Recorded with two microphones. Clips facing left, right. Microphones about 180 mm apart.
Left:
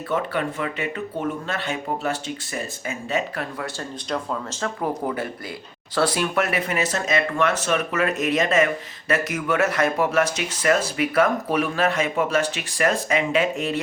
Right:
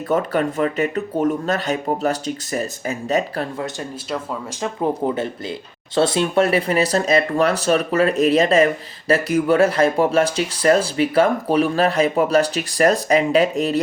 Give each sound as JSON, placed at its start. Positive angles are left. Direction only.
{"t": 0.1, "sound": "speech", "side_deg": -40}
{"t": 4.6, "sound": "speech", "side_deg": -25}